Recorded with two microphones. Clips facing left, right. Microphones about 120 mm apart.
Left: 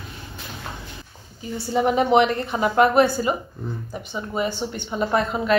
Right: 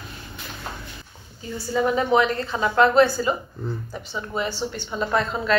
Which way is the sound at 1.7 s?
20° left (ahead or behind).